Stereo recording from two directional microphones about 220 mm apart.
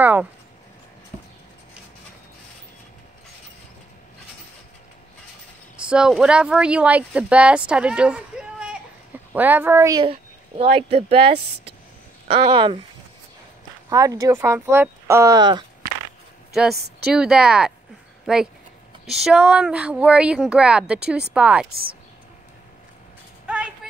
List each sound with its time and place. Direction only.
0.0 s speech: 5° right (ahead or behind)
5.8 s speech: 5° right (ahead or behind); by 12.8 s 25° right (ahead or behind)
13.8 s speech: 15° right (ahead or behind)
17.0 s speech: 5° right (ahead or behind)
23.4 s a sound: 5° right (ahead or behind)